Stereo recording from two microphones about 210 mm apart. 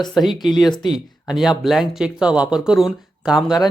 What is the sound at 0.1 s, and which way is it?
Speech, centre (ahead or behind).